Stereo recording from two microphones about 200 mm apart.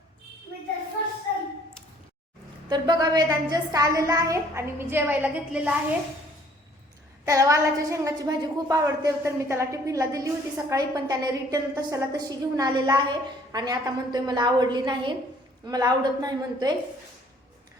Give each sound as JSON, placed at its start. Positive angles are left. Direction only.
{"t": 2.6, "sound": "a woman's voice", "side_deg": -20}
{"t": 7.3, "sound": "a woman's voice", "side_deg": -15}